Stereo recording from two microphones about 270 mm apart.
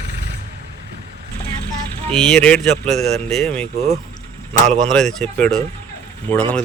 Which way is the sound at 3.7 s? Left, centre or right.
Right.